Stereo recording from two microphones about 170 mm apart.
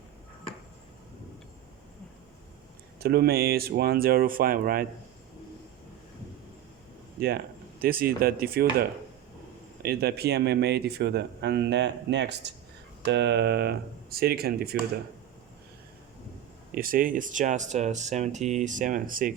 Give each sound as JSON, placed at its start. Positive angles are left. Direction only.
{"t": 3.0, "sound": "speech", "side_deg": -70}
{"t": 7.2, "sound": "speech", "side_deg": -65}
{"t": 16.7, "sound": "speech", "side_deg": -55}